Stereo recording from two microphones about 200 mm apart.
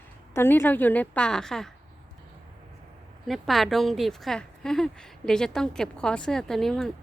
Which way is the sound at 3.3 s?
Centre (ahead or behind).